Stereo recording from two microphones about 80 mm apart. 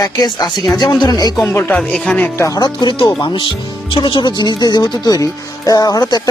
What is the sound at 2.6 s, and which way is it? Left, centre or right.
Speech, left.